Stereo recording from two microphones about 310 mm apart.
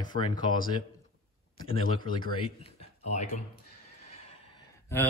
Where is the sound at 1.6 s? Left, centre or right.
Left.